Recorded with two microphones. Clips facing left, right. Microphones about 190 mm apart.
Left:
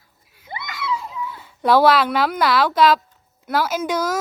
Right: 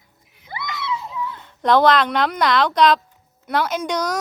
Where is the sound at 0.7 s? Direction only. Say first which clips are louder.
Left 1 dB; 25° right (ahead or behind).